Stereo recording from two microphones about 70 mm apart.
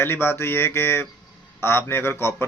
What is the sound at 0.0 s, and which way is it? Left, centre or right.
Speech, left.